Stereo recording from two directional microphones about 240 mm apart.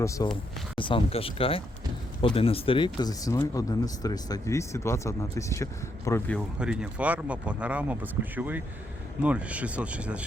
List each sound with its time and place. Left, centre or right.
0.0 s speech: centre
6.6 s speech: centre